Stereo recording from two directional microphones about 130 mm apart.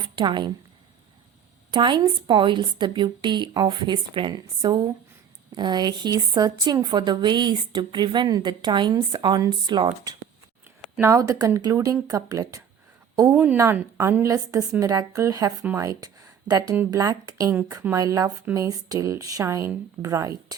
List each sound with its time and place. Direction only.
0.2 s a woman's voice: 35° right (ahead or behind)
1.7 s a woman's voice: 35° right (ahead or behind)
13.3 s a woman's voice: 10° right (ahead or behind); by 20.6 s 25° right (ahead or behind)